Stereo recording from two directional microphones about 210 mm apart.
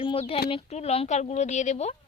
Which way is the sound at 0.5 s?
30° left (ahead or behind).